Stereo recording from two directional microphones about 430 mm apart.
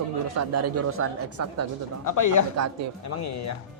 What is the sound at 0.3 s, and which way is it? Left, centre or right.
Speech, right.